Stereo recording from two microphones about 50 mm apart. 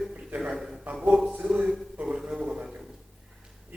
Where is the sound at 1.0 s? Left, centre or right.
Centre.